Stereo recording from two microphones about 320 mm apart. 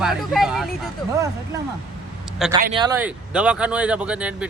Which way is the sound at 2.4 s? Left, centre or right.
Centre.